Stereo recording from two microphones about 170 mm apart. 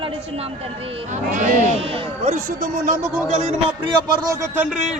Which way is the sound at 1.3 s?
50° right (ahead or behind).